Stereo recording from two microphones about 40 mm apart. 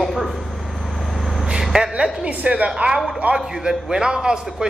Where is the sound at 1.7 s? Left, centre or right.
Right.